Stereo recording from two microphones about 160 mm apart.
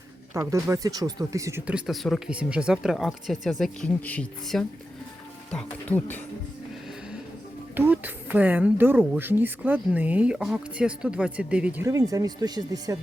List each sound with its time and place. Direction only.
0.3 s speech: 20° right (ahead or behind); by 6.2 s 10° left (ahead or behind)
7.8 s speech: 10° right (ahead or behind)
11.9 s speech: 20° right (ahead or behind)